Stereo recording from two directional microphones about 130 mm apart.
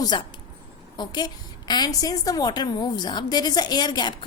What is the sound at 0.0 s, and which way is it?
A woman's voice, 35° left (ahead or behind).